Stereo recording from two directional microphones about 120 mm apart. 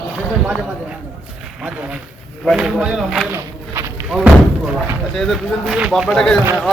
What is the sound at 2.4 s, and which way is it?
Speech, centre (ahead or behind).